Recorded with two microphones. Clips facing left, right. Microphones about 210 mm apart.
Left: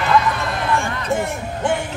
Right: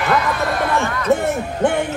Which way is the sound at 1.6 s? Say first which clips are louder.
Right 3 dB; 55° right (ahead or behind).